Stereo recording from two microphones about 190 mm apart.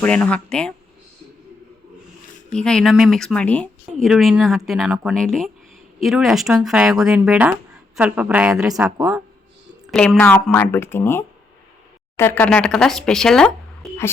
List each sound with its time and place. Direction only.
0.0 s speech: 5° left (ahead or behind)
2.5 s a woman's voice: 5° left (ahead or behind)
8.7 s speech: 20° right (ahead or behind)
9.9 s speech: 5° left (ahead or behind)